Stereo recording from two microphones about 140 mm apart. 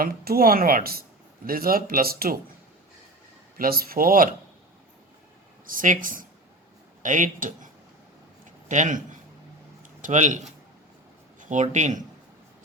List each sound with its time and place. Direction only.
0.0 s speech: 90° right
3.6 s speech: 90° right
5.6 s speech: 70° right (ahead or behind)
8.7 s a man's voice: 60° right (ahead or behind)
10.0 s speech: 60° right (ahead or behind)